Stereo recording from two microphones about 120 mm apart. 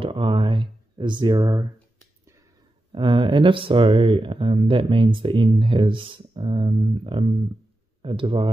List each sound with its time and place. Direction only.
0.0 s speech: 45° right (ahead or behind); by 1.7 s 30° right (ahead or behind)
2.9 s speech: 40° right (ahead or behind)